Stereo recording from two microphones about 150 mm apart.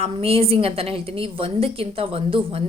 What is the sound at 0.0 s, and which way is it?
A woman's voice, 40° right (ahead or behind).